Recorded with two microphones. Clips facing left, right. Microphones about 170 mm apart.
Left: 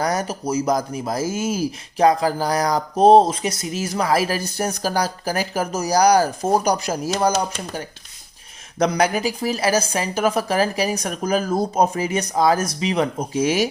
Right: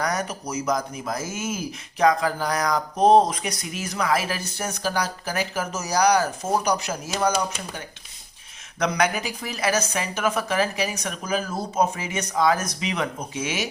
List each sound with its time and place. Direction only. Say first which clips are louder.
0.0 s speech: left 4 dB; 30° left (ahead or behind)
8.8 s speech: left 4 dB; 35° left (ahead or behind)